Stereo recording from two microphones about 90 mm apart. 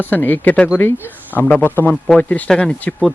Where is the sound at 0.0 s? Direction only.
25° left (ahead or behind).